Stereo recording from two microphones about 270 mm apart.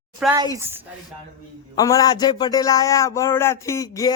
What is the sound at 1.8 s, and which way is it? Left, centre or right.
Speech, centre.